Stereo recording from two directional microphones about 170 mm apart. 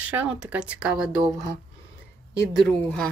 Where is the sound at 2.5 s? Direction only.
5° left (ahead or behind).